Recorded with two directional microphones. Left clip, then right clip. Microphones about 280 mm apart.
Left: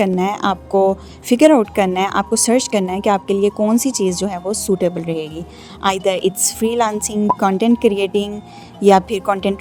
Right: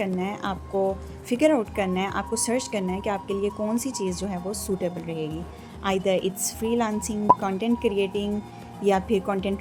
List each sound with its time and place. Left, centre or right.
0.0 s a woman's voice: left